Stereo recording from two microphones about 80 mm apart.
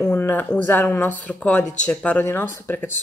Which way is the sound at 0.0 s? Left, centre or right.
Left.